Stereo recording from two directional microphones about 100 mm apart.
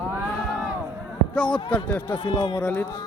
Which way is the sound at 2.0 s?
50° left (ahead or behind).